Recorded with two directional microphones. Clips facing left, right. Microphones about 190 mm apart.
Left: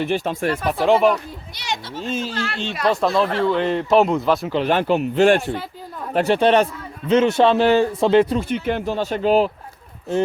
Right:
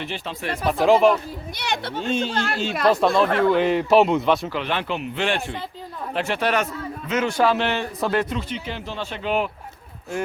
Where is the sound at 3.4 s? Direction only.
10° right (ahead or behind).